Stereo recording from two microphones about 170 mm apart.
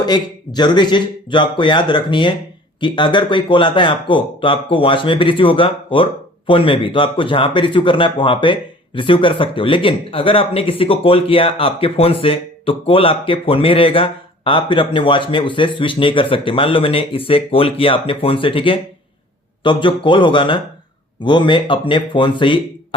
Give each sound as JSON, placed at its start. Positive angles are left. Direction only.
{"t": 0.0, "sound": "speech", "side_deg": 25}